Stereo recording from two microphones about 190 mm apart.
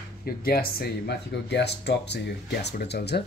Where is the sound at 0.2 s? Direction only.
55° left (ahead or behind).